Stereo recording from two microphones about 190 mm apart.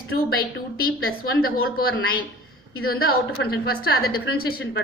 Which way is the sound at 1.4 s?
50° left (ahead or behind).